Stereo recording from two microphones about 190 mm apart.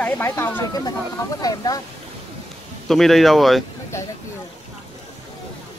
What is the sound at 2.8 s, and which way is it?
Speech, centre (ahead or behind).